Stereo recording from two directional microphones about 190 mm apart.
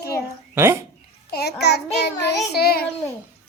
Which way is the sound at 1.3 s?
60° left (ahead or behind).